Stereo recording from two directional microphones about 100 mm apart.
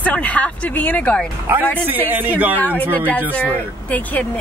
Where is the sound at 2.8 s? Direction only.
15° left (ahead or behind).